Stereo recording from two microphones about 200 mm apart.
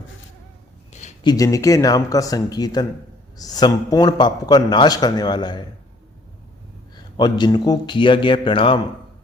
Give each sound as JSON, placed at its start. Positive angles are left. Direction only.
{"t": 1.2, "sound": "a man's voice", "side_deg": 20}
{"t": 6.9, "sound": "a man's voice", "side_deg": 20}